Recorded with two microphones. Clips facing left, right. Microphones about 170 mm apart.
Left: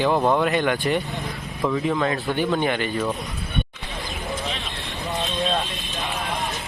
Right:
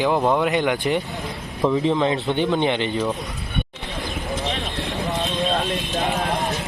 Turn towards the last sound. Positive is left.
turn(degrees=-40)  # may be behind; listen again after turning